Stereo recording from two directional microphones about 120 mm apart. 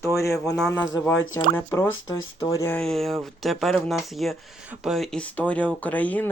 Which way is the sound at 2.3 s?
40° left (ahead or behind).